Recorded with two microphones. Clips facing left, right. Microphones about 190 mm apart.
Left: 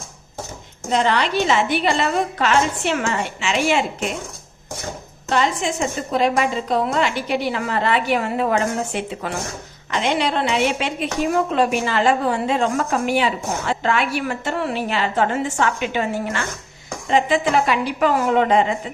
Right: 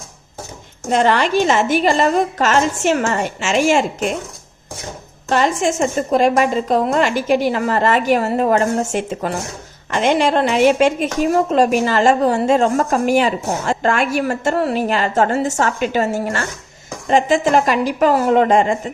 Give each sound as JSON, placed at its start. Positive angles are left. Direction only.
{"t": 0.9, "sound": "a woman's voice", "side_deg": -50}
{"t": 5.3, "sound": "a woman's voice", "side_deg": -50}